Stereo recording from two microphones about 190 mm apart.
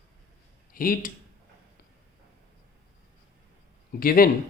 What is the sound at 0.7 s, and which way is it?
Speech, 50° left (ahead or behind).